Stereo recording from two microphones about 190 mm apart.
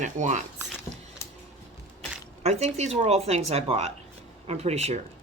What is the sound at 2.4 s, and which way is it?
Speech, 35° right (ahead or behind).